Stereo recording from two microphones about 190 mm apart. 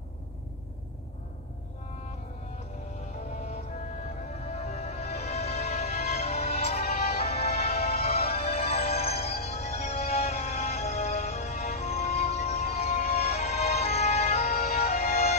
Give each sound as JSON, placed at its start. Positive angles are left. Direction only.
{"t": 3.2, "sound": "music", "side_deg": 35}